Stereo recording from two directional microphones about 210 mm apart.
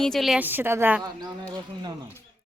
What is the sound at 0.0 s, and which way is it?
Speech, centre (ahead or behind).